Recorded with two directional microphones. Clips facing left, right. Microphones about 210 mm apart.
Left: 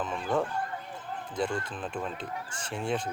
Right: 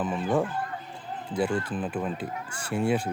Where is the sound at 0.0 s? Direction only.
5° right (ahead or behind).